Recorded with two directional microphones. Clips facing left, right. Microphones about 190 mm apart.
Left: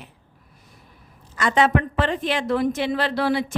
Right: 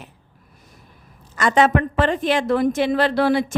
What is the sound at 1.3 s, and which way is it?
A woman's voice, 45° right (ahead or behind).